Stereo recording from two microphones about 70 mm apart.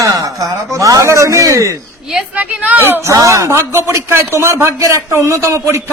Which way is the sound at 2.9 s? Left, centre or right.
Right.